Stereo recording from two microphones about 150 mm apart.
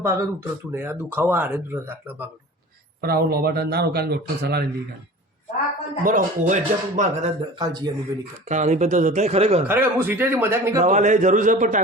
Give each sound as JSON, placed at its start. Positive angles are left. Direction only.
{"t": 0.0, "sound": "speech", "side_deg": -15}
{"t": 3.0, "sound": "speech", "side_deg": -90}
{"t": 6.0, "sound": "speech", "side_deg": -60}
{"t": 7.5, "sound": "a man's voice", "side_deg": -30}
{"t": 8.4, "sound": "speech", "side_deg": -50}
{"t": 9.6, "sound": "speech", "side_deg": -15}
{"t": 10.8, "sound": "speech", "side_deg": -55}